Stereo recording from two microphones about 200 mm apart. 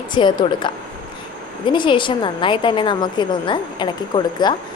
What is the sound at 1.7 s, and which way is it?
A woman's voice, 25° left (ahead or behind).